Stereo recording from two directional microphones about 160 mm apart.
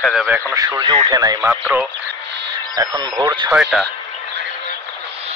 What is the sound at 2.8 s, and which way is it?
Speech, 20° right (ahead or behind).